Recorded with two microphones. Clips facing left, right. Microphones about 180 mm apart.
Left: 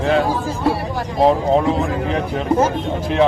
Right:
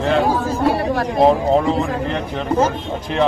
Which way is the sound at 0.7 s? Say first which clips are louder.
Right 4 dB; 65° right (ahead or behind).